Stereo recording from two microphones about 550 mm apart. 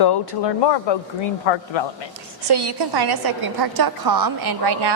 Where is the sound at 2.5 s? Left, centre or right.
Right.